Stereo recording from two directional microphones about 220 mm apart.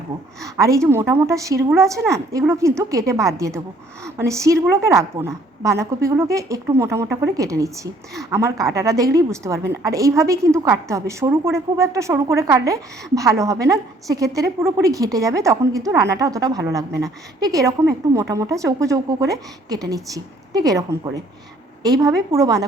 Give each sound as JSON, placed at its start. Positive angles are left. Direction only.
{"t": 0.4, "sound": "a woman's voice", "side_deg": -15}